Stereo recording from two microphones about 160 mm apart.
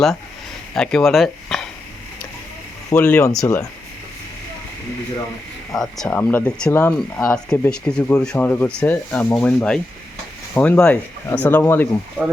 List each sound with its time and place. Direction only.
0.7 s speech: 5° left (ahead or behind)
2.9 s speech: 10° left (ahead or behind)
3.3 s speech: 20° left (ahead or behind)
5.7 s speech: centre (ahead or behind)